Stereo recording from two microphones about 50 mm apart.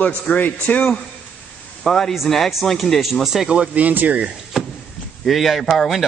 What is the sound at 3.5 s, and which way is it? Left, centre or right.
Speech, right.